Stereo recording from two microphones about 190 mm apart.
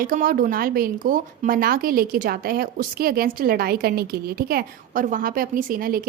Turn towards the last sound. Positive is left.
turn(degrees=-50)  # may be behind; listen again after turning